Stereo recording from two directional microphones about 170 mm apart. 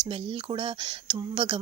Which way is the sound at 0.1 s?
30° right (ahead or behind).